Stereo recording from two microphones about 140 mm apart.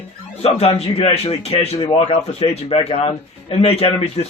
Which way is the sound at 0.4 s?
50° left (ahead or behind).